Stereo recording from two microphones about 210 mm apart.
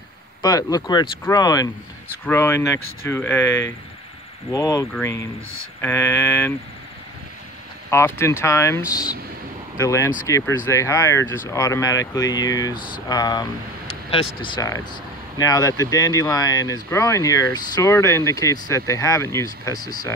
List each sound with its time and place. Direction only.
0.4 s speech: 20° left (ahead or behind)
7.9 s speech: 10° left (ahead or behind)